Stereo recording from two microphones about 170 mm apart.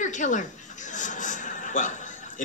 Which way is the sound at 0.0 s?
45° left (ahead or behind).